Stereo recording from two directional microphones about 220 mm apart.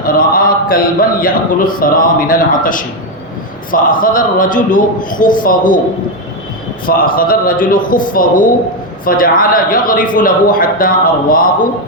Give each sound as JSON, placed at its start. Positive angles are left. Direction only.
{"t": 0.0, "sound": "a man's voice", "side_deg": 40}
{"t": 6.8, "sound": "a man's voice", "side_deg": 40}